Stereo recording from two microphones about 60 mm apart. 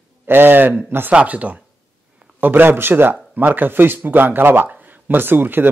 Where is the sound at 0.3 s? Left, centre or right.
Right.